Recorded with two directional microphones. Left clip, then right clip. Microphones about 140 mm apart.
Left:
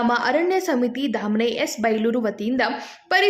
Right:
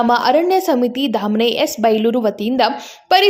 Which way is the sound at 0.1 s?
25° right (ahead or behind).